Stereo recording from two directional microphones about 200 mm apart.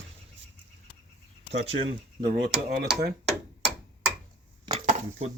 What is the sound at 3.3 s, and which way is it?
Tick-tock, centre (ahead or behind).